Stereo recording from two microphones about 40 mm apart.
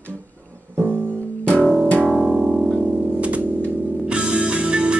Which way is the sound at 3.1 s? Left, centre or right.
Right.